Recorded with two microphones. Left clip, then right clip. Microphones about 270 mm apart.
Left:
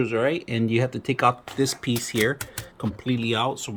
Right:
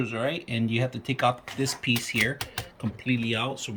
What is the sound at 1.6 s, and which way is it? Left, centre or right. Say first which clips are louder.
Speech: even; left.